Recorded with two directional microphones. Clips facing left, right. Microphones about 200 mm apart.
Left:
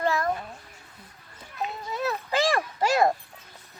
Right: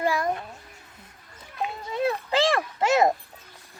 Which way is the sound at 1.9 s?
25° right (ahead or behind).